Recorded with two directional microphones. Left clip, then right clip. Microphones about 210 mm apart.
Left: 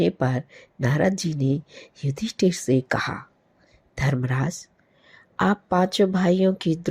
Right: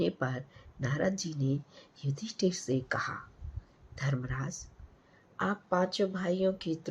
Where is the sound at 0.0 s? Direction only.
30° left (ahead or behind).